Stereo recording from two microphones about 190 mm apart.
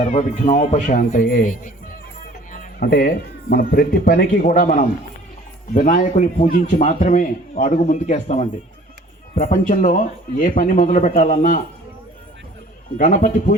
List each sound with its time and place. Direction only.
0.0 s a man's voice: 35° left (ahead or behind)
13.0 s a man's voice: 40° left (ahead or behind)